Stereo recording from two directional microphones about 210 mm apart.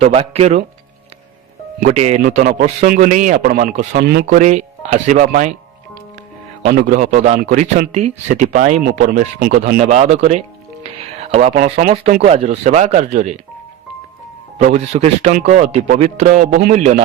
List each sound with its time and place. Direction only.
0.0 s speech: 30° right (ahead or behind)
1.8 s speech: 35° right (ahead or behind)
4.4 s speech: 35° right (ahead or behind)
6.7 s speech: 40° right (ahead or behind)
9.8 s speech: 30° right (ahead or behind)
14.6 s speech: 30° right (ahead or behind)